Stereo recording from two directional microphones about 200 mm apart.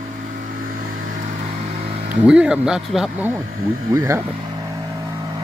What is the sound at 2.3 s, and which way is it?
Speech, 5° right (ahead or behind).